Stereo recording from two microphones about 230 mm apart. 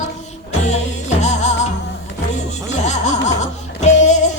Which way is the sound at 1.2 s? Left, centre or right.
Left.